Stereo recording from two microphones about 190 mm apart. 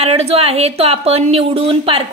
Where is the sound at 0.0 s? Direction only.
30° right (ahead or behind).